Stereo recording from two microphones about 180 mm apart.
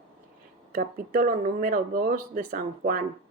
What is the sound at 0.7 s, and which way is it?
Speech, 50° right (ahead or behind).